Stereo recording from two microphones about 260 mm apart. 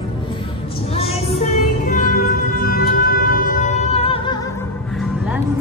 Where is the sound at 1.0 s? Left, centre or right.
Left.